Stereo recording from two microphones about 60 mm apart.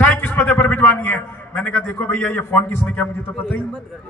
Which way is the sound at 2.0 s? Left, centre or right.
Left.